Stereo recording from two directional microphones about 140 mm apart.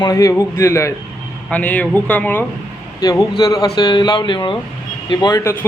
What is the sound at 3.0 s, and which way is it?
A man's voice, 25° left (ahead or behind).